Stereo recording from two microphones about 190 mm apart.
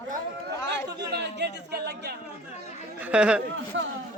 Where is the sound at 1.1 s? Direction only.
60° right (ahead or behind).